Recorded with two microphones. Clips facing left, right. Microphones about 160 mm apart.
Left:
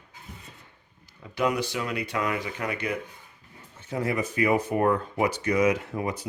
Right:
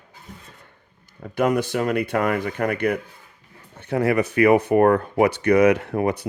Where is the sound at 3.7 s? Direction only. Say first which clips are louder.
Right 8 dB; 65° right (ahead or behind).